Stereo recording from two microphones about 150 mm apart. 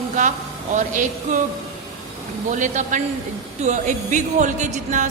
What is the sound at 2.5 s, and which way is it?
A woman's voice, 55° right (ahead or behind).